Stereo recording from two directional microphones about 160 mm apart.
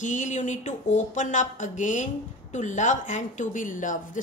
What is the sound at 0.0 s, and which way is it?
Speech, 50° left (ahead or behind).